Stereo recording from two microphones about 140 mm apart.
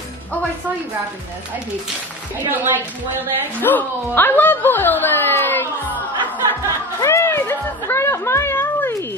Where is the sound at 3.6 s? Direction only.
15° left (ahead or behind).